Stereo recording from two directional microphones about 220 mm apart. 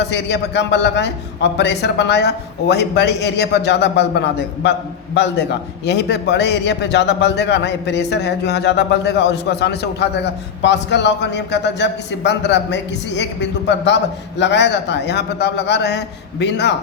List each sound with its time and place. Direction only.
0.0 s a man's voice: 50° left (ahead or behind)